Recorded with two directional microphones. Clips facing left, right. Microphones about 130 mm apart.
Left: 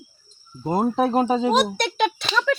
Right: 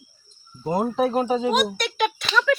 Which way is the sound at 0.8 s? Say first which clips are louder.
Left 2 dB; 30° left (ahead or behind).